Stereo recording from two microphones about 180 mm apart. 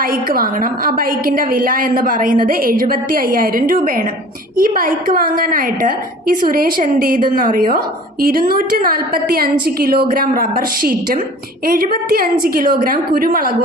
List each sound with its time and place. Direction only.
0.0 s a woman's voice: 50° right (ahead or behind)